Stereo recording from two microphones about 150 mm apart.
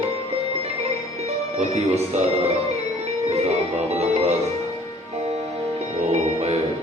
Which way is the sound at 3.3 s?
45° right (ahead or behind).